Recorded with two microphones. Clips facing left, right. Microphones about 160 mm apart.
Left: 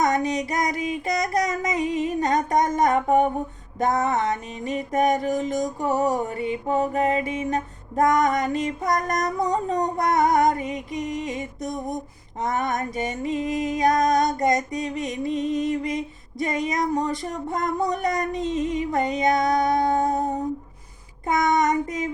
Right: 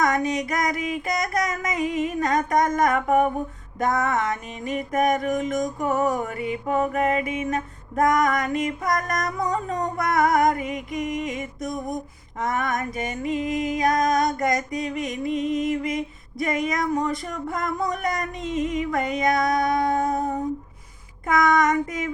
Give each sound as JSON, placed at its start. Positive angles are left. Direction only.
{"t": 0.0, "sound": "child singing", "side_deg": 30}
{"t": 3.8, "sound": "music", "side_deg": 30}